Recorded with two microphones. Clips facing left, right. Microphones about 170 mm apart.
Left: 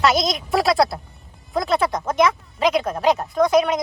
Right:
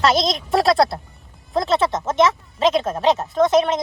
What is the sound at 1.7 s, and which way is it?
Speech, 25° right (ahead or behind).